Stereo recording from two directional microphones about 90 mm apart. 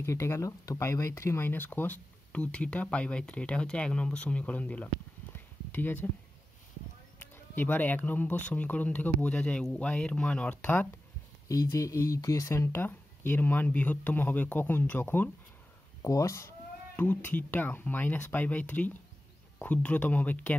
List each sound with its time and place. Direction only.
0.0 s speech: 30° left (ahead or behind)
5.3 s a sound: 20° left (ahead or behind)
7.2 s speech: 20° left (ahead or behind)
11.4 s speech: 35° left (ahead or behind); by 15.2 s 20° left (ahead or behind)
16.0 s speech: 35° left (ahead or behind)
16.9 s speech: 20° left (ahead or behind)